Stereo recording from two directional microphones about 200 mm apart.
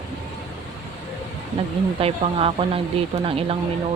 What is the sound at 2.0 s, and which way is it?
Speech, 30° right (ahead or behind).